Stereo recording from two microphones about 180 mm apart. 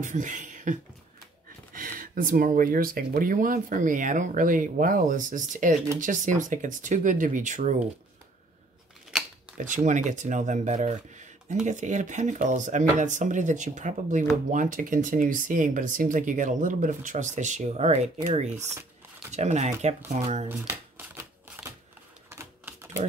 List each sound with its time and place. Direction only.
0.0 s speech: 45° right (ahead or behind)
9.6 s speech: 45° right (ahead or behind)
20.4 s shuffling cards: 10° right (ahead or behind)
22.3 s typewriter: 15° right (ahead or behind)